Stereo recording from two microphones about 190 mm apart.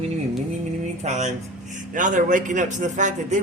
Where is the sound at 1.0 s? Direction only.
35° right (ahead or behind).